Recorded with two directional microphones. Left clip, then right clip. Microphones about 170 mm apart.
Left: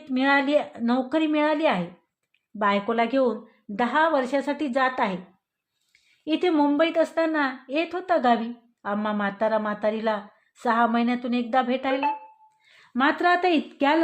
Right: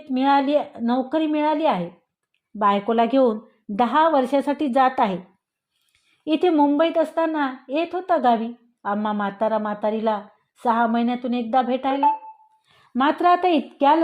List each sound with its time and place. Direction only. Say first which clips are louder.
0.0 s a woman's voice: right 3 dB; 20° right (ahead or behind); by 5.2 s 35° right (ahead or behind)
6.2 s a woman's voice: right 4 dB; 30° right (ahead or behind)